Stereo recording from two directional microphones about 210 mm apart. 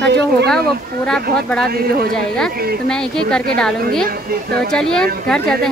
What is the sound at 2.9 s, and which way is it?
A woman's voice, 5° left (ahead or behind).